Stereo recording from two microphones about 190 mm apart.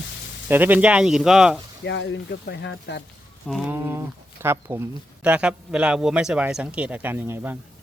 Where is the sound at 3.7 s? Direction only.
10° right (ahead or behind).